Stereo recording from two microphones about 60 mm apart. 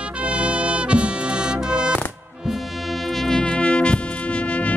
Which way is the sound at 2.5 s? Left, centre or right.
Centre.